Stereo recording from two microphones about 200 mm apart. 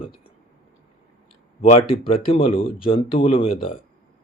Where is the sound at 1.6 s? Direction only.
30° left (ahead or behind).